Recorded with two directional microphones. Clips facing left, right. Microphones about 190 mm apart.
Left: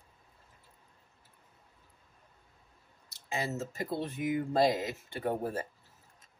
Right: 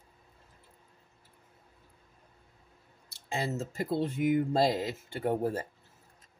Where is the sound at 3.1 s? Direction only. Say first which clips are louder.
Right 2 dB; 30° right (ahead or behind).